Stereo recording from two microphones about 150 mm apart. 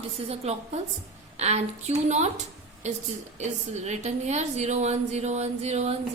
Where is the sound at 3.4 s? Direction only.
50° right (ahead or behind).